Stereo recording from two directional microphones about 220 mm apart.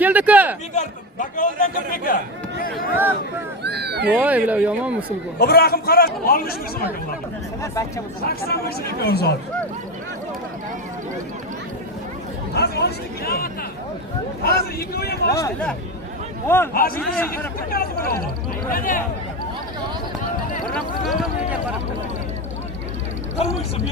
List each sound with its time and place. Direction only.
0.0 s speech: 5° right (ahead or behind)
0.8 s a man's voice: 35° left (ahead or behind)
2.7 s a sound: 10° right (ahead or behind)
3.6 s a sound: 50° right (ahead or behind)
4.1 s speech: 5° right (ahead or behind)
5.4 s a man's voice: 45° left (ahead or behind)
7.6 s speech: 15° left (ahead or behind)
8.4 s a man's voice: 45° left (ahead or behind)
12.5 s a man's voice: 45° left (ahead or behind)
15.3 s speech: 15° left (ahead or behind)
16.7 s a man's voice: 40° left (ahead or behind)
20.7 s speech: centre (ahead or behind)